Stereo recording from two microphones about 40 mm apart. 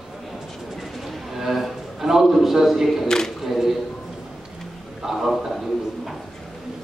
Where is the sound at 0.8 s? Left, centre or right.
Centre.